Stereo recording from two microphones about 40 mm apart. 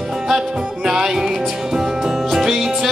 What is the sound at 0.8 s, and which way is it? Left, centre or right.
Music, centre.